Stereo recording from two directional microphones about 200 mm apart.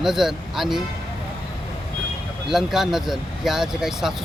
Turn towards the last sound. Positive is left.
turn(degrees=0)  # may be behind; listen again after turning